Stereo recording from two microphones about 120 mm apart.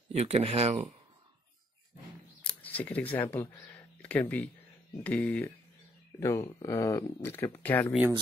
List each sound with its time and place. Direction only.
0.1 s speech: 65° right (ahead or behind)
2.4 s speech: 15° left (ahead or behind)
3.7 s a sound: 10° left (ahead or behind)
5.0 s speech: 10° left (ahead or behind)
6.1 s speech: 25° left (ahead or behind)